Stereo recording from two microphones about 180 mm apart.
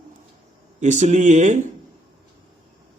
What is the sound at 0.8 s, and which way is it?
Speech, 40° right (ahead or behind).